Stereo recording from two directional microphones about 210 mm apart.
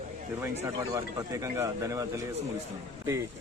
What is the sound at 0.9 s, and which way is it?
A man's voice, 15° right (ahead or behind).